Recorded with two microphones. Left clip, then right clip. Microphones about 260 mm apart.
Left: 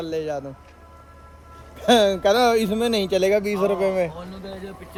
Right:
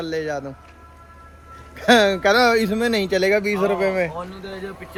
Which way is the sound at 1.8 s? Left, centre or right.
Centre.